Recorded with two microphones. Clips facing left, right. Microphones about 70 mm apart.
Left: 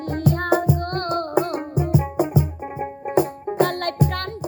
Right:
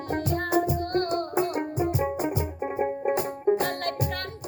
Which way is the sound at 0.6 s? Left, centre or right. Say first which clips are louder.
Left 2 dB; left.